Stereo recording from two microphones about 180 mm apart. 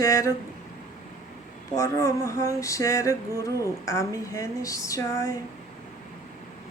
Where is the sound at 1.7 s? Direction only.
15° left (ahead or behind).